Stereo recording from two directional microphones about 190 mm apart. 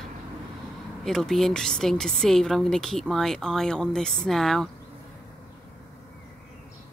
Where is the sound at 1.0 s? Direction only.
Centre (ahead or behind).